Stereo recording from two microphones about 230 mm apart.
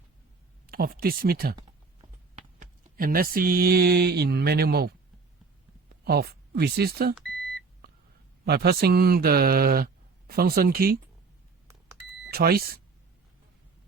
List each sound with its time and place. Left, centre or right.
0.7 s speech: right
2.6 s mantra: right
6.1 s speech: right
8.4 s speech: right
12.2 s speech: right